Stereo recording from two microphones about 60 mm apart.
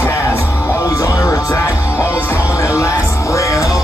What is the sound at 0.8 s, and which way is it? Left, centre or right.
Music, left.